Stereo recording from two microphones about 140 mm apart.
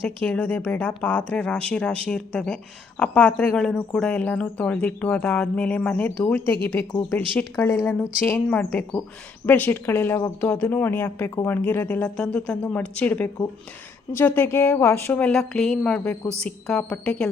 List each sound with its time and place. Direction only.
0.2 s speech: 10° left (ahead or behind)